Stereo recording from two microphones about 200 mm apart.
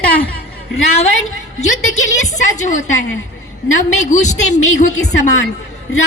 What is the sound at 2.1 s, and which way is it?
Speech, 35° left (ahead or behind).